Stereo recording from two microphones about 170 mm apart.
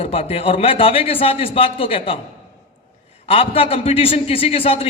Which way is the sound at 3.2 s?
35° left (ahead or behind).